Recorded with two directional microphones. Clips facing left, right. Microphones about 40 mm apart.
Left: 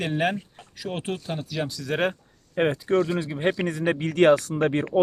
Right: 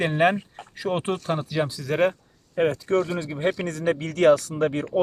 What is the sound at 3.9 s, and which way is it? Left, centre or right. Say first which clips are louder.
Speech: even; left.